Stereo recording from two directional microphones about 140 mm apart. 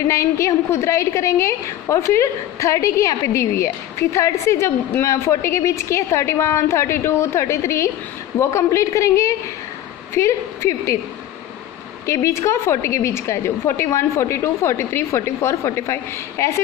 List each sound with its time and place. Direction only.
0.1 s a woman's voice: 20° left (ahead or behind)
12.1 s a woman's voice: 20° left (ahead or behind)